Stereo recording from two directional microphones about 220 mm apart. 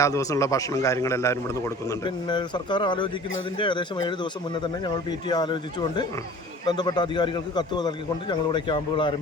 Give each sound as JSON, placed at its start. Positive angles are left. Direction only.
{"t": 0.0, "sound": "a man's voice", "side_deg": 15}
{"t": 6.7, "sound": "a man's voice", "side_deg": 20}